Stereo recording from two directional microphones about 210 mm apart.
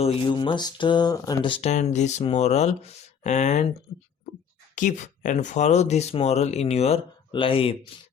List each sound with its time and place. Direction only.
0.0 s speech: 25° left (ahead or behind)
4.7 s speech: 35° left (ahead or behind)